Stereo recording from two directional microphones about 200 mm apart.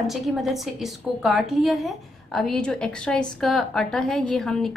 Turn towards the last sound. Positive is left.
turn(degrees=0)  # may be behind; listen again after turning